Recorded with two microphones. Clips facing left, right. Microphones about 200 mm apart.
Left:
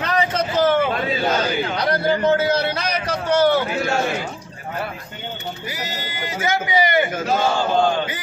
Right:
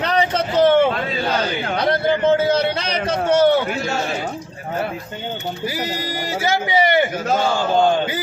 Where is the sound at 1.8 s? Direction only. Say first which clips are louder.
Right 2 dB; 25° right (ahead or behind).